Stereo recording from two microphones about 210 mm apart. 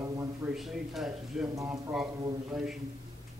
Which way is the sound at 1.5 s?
10° right (ahead or behind).